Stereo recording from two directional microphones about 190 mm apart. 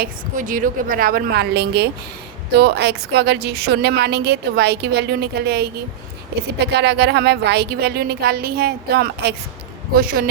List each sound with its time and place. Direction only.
0.0 s a woman's voice: 45° right (ahead or behind)